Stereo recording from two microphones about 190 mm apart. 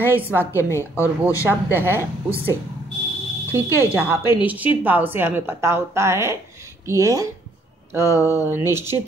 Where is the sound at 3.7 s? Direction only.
20° left (ahead or behind).